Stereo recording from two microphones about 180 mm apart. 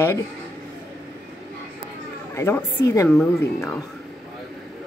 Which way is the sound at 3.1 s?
5° left (ahead or behind).